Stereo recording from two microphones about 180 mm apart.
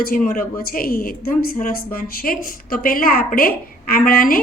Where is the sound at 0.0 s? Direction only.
55° left (ahead or behind).